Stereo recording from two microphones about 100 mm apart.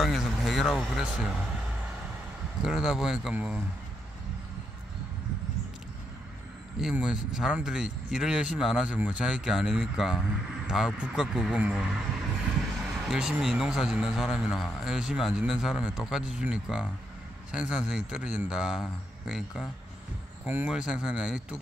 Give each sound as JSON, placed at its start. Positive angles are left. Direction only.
{"t": 0.0, "sound": "speech", "side_deg": 0}
{"t": 2.6, "sound": "speech", "side_deg": -5}
{"t": 6.8, "sound": "speech", "side_deg": -5}
{"t": 20.4, "sound": "speech", "side_deg": -15}